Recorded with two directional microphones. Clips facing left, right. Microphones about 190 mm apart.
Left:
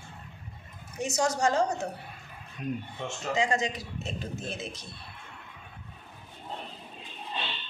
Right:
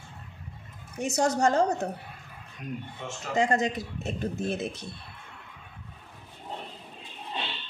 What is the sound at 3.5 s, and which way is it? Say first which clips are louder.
A man's voice: right 3 dB; 55° right (ahead or behind).